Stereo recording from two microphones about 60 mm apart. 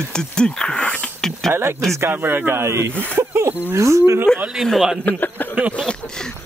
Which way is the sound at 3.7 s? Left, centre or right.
Right.